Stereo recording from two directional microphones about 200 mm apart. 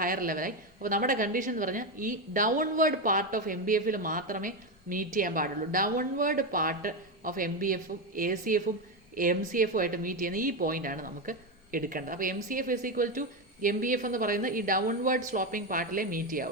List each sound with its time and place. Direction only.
0.0 s a woman's voice: 45° right (ahead or behind)